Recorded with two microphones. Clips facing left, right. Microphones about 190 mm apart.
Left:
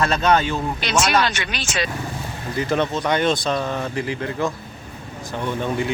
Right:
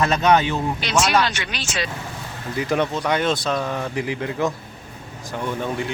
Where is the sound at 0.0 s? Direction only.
15° right (ahead or behind).